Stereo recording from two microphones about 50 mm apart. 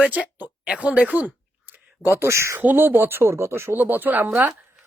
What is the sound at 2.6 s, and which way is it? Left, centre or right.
Speech, right.